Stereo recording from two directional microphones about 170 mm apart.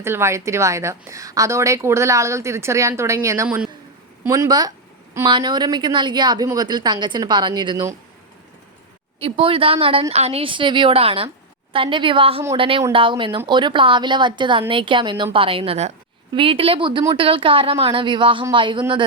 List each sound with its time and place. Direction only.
0.0 s a woman's voice: 15° right (ahead or behind)
9.2 s speech: 30° right (ahead or behind)